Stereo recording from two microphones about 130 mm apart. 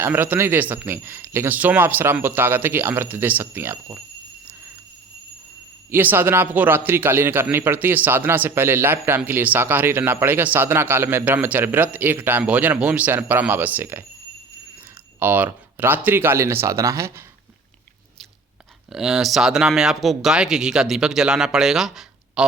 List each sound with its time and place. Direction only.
0.0 s a man's voice: 15° right (ahead or behind)
5.9 s a man's voice: 15° right (ahead or behind)
15.2 s a man's voice: 15° right (ahead or behind)
18.9 s speech: 5° right (ahead or behind)